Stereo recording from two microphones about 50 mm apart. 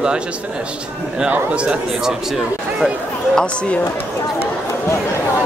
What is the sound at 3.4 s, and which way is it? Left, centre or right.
Speech, left.